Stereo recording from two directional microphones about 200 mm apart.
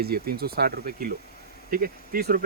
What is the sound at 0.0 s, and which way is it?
Speech, 50° right (ahead or behind).